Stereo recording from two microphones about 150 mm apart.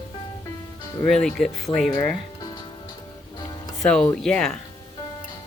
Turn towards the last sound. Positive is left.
turn(degrees=5)  # may be behind; listen again after turning